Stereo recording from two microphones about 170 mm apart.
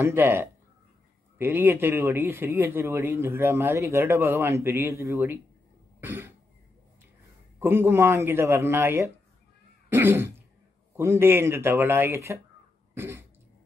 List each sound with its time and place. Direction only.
0.0 s a man's voice: 15° right (ahead or behind)
5.9 s cough: 10° right (ahead or behind)
7.5 s a man's voice: 15° right (ahead or behind)
12.9 s throat clearing: 15° right (ahead or behind)